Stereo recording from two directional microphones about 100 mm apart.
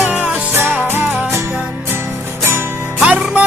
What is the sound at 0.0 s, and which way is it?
Music, 20° right (ahead or behind).